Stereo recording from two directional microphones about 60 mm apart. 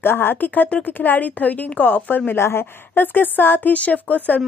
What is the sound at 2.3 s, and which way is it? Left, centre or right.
Speech, left.